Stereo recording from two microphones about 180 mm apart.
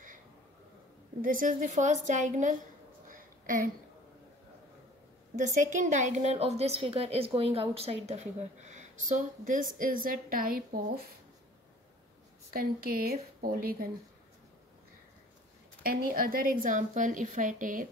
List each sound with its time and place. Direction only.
1.2 s a woman's voice: 50° right (ahead or behind)
3.1 s a sound: 50° right (ahead or behind)
5.4 s a woman's voice: 45° right (ahead or behind)
12.5 s speech: 55° right (ahead or behind)
15.8 s a woman's voice: 55° right (ahead or behind)